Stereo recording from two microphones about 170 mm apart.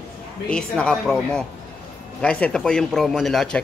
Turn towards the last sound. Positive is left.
turn(degrees=0)  # may be behind; listen again after turning